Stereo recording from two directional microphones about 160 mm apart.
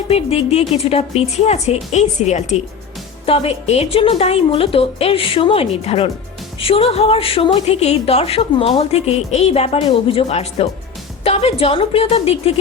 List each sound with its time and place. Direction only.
0.1 s a woman's voice: 40° left (ahead or behind)